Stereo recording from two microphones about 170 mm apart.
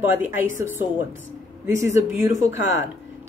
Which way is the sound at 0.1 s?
10° right (ahead or behind).